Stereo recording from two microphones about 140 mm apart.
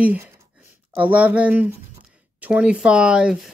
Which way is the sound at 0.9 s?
10° right (ahead or behind).